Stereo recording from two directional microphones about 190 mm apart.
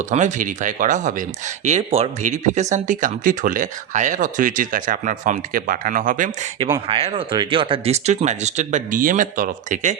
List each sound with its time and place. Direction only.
0.0 s speech: 40° right (ahead or behind)
6.8 s speech: 30° right (ahead or behind)